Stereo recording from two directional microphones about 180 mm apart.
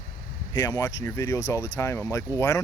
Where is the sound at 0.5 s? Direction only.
20° left (ahead or behind).